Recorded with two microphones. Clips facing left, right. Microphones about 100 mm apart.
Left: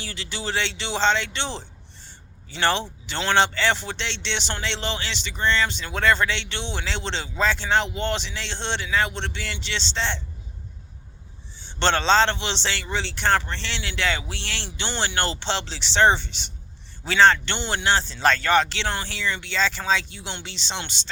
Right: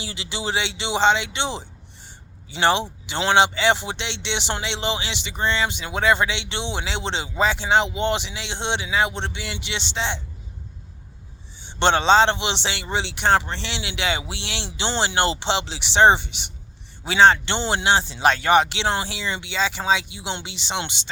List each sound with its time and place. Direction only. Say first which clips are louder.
0.0 s speech: right 3 dB; 20° right (ahead or behind)
11.6 s speech: right 3 dB; 15° right (ahead or behind)